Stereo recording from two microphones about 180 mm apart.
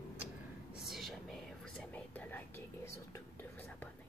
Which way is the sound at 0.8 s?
Centre (ahead or behind).